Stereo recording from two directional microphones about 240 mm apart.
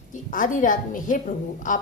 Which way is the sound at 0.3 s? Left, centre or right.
Left.